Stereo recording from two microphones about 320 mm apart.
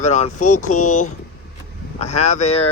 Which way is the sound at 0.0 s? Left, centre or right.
Left.